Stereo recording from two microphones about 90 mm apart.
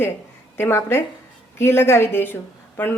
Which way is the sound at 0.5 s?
25° left (ahead or behind).